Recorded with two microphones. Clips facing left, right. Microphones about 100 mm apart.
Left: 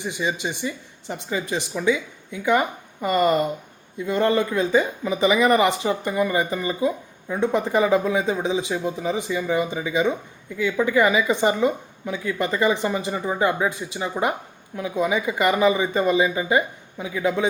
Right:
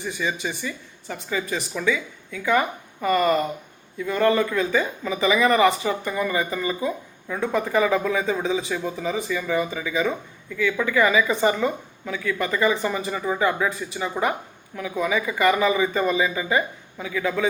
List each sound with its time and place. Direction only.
0.0 s speech: 20° left (ahead or behind)